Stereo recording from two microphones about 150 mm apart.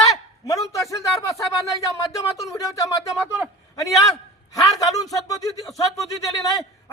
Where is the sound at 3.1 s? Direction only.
Centre (ahead or behind).